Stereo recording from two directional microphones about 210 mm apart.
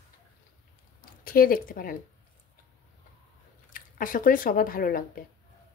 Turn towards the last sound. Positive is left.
turn(degrees=45)  # may be behind; listen again after turning